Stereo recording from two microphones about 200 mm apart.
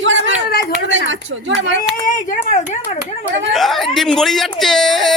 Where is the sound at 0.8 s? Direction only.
70° right (ahead or behind).